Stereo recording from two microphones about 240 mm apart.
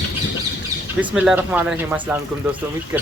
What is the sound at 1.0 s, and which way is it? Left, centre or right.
Speech, centre.